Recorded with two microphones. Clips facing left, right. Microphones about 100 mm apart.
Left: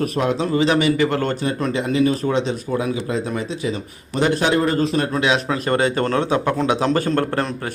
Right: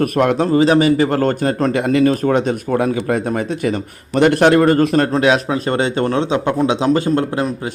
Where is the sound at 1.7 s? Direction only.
60° right (ahead or behind).